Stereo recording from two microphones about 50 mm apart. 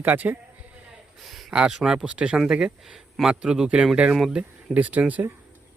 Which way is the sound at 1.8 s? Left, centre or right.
Centre.